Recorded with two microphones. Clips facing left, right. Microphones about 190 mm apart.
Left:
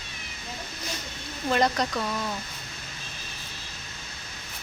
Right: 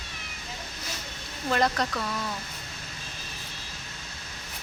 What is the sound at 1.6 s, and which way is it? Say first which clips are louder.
Speech: left 1 dB; 15° left (ahead or behind).